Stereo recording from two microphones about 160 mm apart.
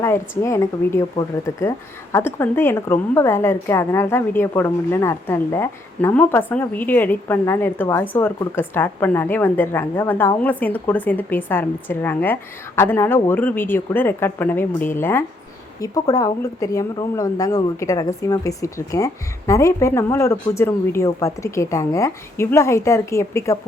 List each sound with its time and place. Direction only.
0.0 s a woman's voice: 15° left (ahead or behind)